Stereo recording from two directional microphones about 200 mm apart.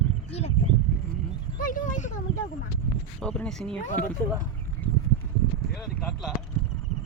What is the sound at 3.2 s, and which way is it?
Speech, 5° left (ahead or behind).